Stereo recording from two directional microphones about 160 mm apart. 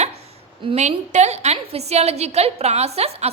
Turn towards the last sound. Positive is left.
turn(degrees=-40)  # may be behind; listen again after turning